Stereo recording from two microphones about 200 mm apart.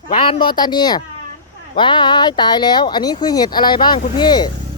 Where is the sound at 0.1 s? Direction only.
25° left (ahead or behind).